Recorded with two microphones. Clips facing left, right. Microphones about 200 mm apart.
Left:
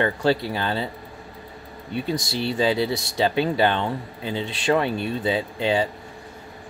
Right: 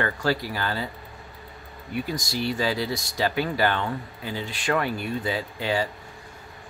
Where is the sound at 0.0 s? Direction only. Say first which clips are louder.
Left 4 dB; 25° left (ahead or behind).